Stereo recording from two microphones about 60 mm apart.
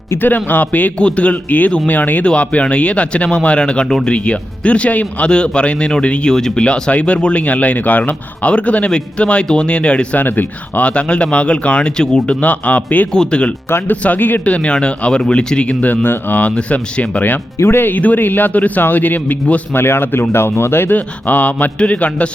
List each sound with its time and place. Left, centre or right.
0.2 s speech: left
10.2 s speech: left
13.1 s speech: centre
13.7 s a man's voice: left
13.9 s speech: left
14.4 s speech: centre
17.6 s a man's voice: left
19.7 s a man's voice: left
20.9 s speech: left